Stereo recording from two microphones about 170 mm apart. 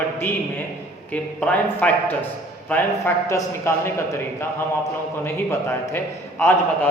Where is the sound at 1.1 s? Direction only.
10° left (ahead or behind).